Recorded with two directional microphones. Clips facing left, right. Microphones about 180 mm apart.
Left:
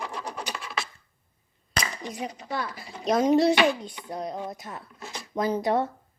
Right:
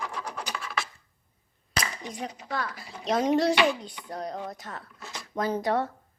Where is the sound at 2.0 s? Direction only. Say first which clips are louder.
Left 2 dB; 5° left (ahead or behind).